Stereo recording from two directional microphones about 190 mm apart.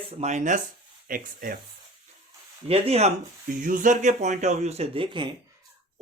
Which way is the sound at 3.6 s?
45° right (ahead or behind).